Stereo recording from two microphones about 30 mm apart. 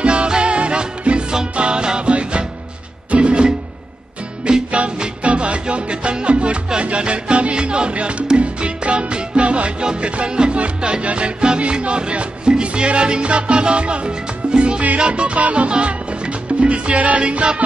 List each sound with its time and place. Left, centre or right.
0.0 s music: right
4.7 s music: right
17.2 s music: right